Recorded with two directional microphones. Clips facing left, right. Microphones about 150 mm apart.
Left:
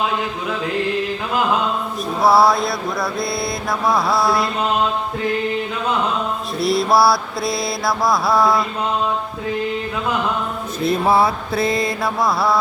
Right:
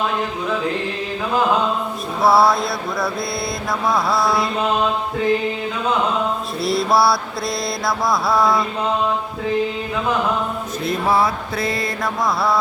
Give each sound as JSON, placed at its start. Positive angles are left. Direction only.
{"t": 2.2, "sound": "mantra", "side_deg": 0}
{"t": 6.6, "sound": "mantra", "side_deg": 0}
{"t": 10.8, "sound": "mantra", "side_deg": 30}
{"t": 12.2, "sound": "mantra", "side_deg": 0}